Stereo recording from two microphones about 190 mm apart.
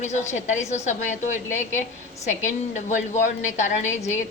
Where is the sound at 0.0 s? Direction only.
40° left (ahead or behind).